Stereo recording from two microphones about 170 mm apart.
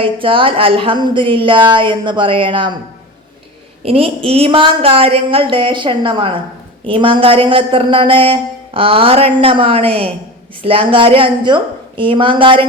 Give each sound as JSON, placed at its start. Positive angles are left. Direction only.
{"t": 0.0, "sound": "a woman's voice", "side_deg": -30}
{"t": 3.8, "sound": "a woman's voice", "side_deg": -35}